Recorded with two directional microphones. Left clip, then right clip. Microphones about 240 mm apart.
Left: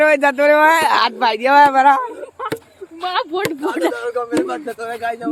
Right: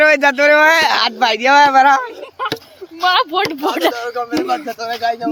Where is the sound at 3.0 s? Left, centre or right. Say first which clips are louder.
Right 6 dB; right.